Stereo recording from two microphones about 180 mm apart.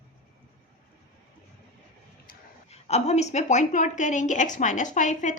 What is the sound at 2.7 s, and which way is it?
A woman's voice, 35° left (ahead or behind).